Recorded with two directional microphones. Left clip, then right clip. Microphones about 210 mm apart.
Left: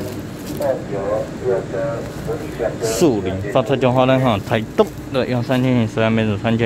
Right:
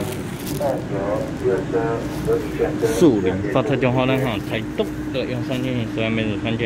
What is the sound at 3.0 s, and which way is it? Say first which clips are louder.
Speech: right 2 dB; 10° left (ahead or behind).